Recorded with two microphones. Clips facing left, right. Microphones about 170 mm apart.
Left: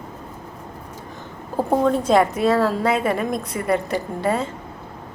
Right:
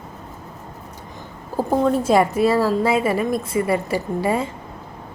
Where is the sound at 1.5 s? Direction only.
5° right (ahead or behind).